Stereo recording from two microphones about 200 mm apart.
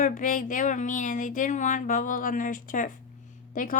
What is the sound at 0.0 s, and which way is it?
Speech, 40° left (ahead or behind).